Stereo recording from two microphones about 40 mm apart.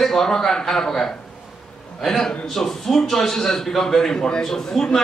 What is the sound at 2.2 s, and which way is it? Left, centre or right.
A man's voice, centre.